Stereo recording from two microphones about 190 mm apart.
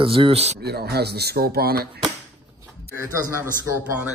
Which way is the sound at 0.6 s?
55° right (ahead or behind).